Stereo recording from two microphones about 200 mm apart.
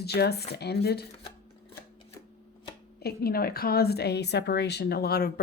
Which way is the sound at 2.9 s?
50° left (ahead or behind).